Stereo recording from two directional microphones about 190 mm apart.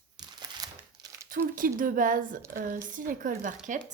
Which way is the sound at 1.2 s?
45° right (ahead or behind).